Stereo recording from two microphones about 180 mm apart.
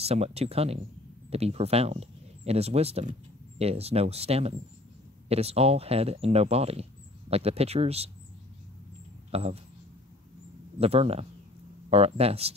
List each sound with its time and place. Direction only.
0.0 s speech: 35° right (ahead or behind)
9.3 s speech: 35° right (ahead or behind)
10.8 s speech: 35° right (ahead or behind)